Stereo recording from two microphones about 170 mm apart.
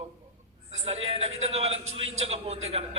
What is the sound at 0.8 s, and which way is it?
A man's voice, 40° right (ahead or behind).